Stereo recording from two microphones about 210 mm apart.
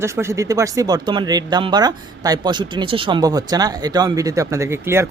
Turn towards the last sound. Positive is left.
turn(degrees=-10)  # may be behind; listen again after turning